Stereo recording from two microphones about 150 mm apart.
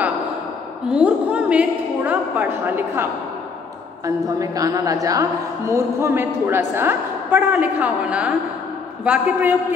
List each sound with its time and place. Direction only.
0.8 s a woman's voice: 10° right (ahead or behind)